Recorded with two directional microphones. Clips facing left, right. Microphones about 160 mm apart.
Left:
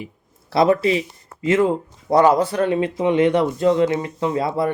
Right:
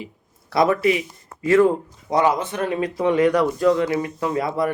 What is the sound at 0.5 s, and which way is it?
Speech, 30° left (ahead or behind).